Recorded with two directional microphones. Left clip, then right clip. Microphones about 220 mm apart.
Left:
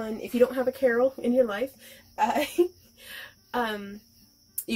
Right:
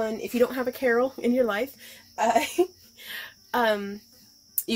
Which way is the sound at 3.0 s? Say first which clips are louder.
Right 5 dB; 30° right (ahead or behind).